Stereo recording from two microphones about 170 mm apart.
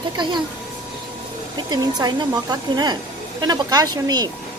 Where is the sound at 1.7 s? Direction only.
25° right (ahead or behind).